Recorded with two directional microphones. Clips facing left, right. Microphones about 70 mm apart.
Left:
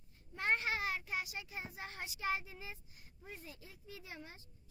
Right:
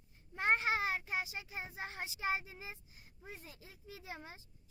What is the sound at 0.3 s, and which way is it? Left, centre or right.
A child's voice, right.